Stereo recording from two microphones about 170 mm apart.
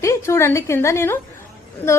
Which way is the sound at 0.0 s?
15° left (ahead or behind).